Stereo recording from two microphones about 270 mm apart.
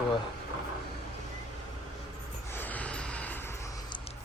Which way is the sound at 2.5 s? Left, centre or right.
Centre.